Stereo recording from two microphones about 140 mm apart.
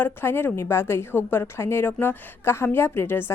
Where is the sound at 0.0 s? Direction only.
15° left (ahead or behind).